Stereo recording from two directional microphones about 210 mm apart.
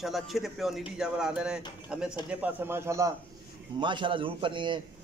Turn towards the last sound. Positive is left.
turn(degrees=-25)  # may be behind; listen again after turning